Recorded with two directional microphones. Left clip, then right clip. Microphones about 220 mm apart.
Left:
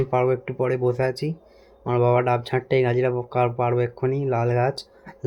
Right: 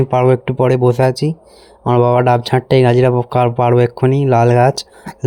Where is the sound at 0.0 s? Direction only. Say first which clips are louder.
Right 9 dB; 40° right (ahead or behind).